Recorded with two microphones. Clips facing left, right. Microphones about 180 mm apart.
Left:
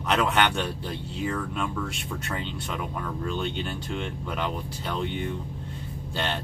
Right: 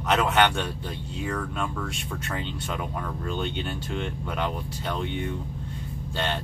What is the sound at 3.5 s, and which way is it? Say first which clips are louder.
Speech: right 1 dB; centre (ahead or behind).